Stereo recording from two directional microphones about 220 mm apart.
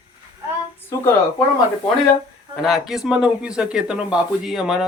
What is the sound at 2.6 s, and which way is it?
Speech, centre (ahead or behind).